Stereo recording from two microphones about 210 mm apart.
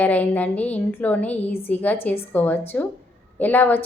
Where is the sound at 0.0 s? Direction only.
5° left (ahead or behind).